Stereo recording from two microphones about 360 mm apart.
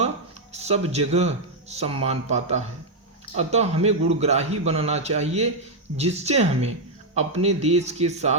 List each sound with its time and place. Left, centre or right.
0.5 s a man's voice: centre